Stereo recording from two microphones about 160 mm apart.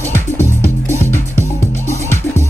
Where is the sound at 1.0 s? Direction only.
15° left (ahead or behind).